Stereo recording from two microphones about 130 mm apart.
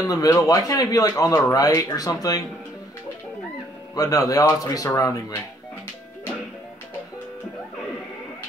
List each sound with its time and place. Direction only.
0.0 s speech: 25° left (ahead or behind)
3.9 s speech: 25° left (ahead or behind)